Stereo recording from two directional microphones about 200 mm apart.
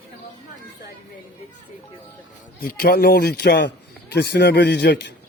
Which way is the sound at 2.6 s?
50° left (ahead or behind).